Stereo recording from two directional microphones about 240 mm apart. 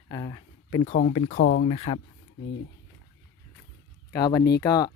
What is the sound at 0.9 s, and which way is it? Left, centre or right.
Speech, left.